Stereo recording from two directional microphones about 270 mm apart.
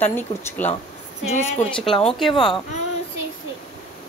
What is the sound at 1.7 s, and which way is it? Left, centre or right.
Speech, centre.